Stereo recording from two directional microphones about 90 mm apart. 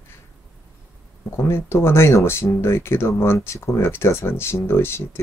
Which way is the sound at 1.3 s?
30° left (ahead or behind).